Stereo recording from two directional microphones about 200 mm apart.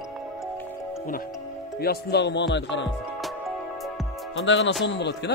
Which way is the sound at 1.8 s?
55° left (ahead or behind).